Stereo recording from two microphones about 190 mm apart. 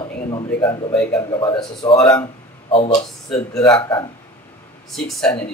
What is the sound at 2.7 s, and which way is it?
Speech, 30° left (ahead or behind).